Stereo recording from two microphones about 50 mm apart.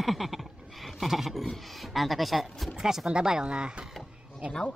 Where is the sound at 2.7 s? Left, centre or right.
Centre.